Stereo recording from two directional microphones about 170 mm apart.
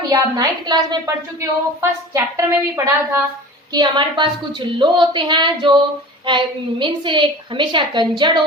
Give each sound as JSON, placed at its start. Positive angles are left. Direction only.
{"t": 0.1, "sound": "a woman's voice", "side_deg": -25}